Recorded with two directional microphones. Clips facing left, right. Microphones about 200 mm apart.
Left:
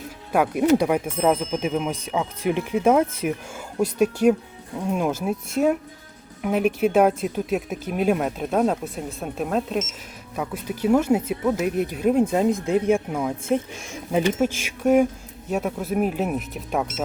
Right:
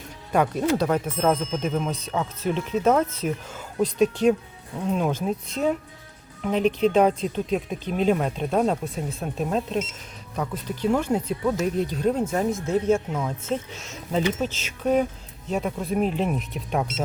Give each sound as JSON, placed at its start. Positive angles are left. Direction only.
{"t": 0.3, "sound": "speech", "side_deg": 10}